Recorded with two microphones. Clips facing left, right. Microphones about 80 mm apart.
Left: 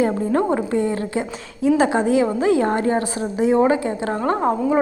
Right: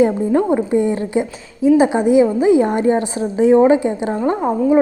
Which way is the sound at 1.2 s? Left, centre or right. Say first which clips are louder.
Right 4 dB; centre.